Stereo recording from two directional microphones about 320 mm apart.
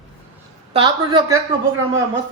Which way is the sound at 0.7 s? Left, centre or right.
Centre.